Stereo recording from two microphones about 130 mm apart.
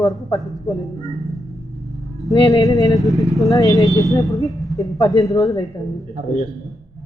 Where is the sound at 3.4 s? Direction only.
25° left (ahead or behind).